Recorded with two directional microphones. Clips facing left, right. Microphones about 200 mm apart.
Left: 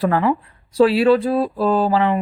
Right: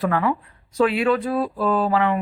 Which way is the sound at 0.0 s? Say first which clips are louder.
Left 4 dB; 30° left (ahead or behind).